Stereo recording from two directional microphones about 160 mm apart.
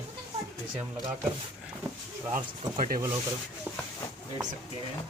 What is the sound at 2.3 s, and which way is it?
Speech, 55° right (ahead or behind).